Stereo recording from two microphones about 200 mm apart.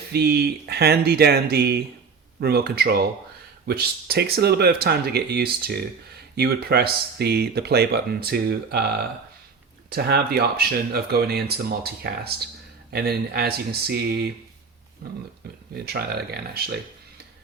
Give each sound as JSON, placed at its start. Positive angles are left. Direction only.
{"t": 0.1, "sound": "speech", "side_deg": -50}
{"t": 9.9, "sound": "speech", "side_deg": -50}